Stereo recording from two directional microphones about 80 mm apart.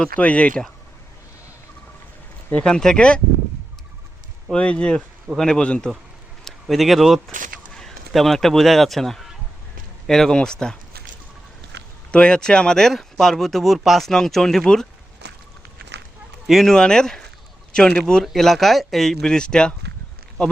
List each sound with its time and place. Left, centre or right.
0.2 s speech: centre
2.5 s speech: centre
4.5 s speech: centre
6.4 s speech: centre
12.1 s speech: centre
16.5 s a man's voice: centre